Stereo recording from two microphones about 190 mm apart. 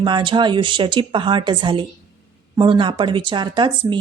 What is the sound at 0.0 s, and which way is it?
Speech, 25° right (ahead or behind).